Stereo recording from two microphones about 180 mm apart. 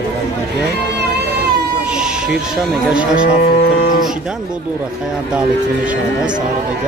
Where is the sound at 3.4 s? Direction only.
60° left (ahead or behind).